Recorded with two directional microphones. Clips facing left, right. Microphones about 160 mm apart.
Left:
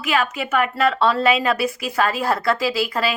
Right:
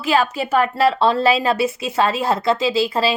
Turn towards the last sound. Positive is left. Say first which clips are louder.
# right 3 dB
turn(degrees=-30)  # may be behind; listen again after turning